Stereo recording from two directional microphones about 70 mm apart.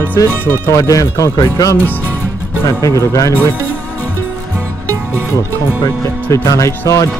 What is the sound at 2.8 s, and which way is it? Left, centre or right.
Speech, left.